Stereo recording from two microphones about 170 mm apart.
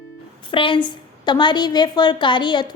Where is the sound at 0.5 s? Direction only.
30° left (ahead or behind).